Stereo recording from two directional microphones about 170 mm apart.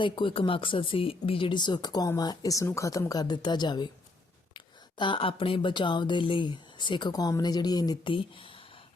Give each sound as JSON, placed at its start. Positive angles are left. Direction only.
{"t": 0.0, "sound": "speech", "side_deg": 30}